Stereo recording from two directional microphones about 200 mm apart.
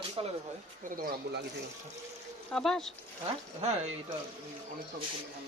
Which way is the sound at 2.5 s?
5° left (ahead or behind).